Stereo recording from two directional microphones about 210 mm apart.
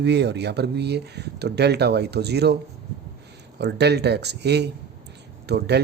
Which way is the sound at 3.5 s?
55° right (ahead or behind).